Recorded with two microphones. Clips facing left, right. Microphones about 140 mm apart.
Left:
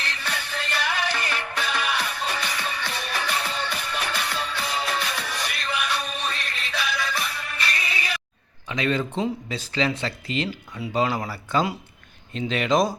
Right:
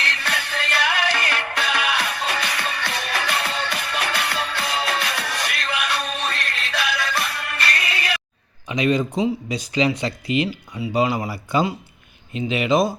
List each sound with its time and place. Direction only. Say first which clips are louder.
0.0 s music: right 4 dB; 80° right
8.7 s speech: right 5 dB; 15° right (ahead or behind)